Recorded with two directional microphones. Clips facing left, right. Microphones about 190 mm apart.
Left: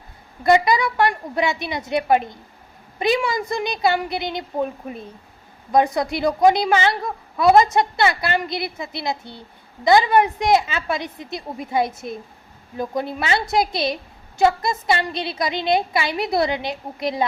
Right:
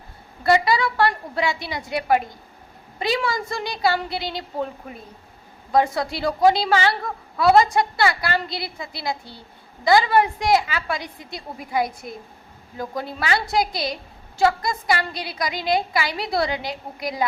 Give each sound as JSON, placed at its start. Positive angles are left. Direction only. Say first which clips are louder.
{"t": 0.4, "sound": "a woman's voice", "louder": "left 2 dB", "side_deg": 20}